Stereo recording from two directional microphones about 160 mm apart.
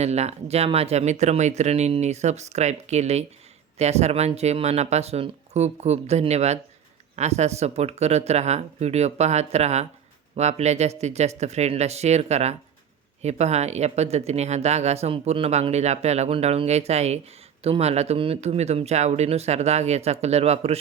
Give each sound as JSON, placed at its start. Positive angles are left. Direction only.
{"t": 0.0, "sound": "speech", "side_deg": -45}